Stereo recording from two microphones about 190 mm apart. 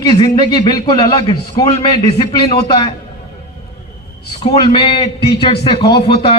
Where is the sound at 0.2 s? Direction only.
20° left (ahead or behind).